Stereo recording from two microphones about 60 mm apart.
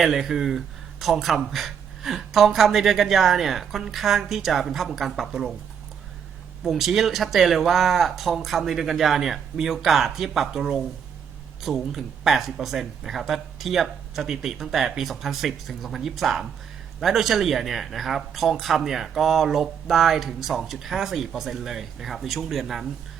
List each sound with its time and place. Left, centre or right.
0.0 s speech: centre
6.7 s speech: centre